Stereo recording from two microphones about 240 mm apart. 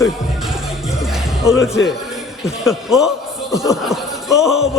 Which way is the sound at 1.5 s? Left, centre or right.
Centre.